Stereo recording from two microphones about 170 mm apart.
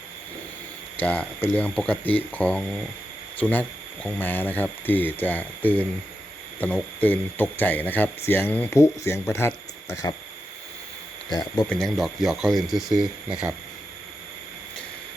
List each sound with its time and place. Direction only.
0.9 s speech: 10° left (ahead or behind)
11.3 s speech: 25° left (ahead or behind)
11.7 s speech: centre (ahead or behind)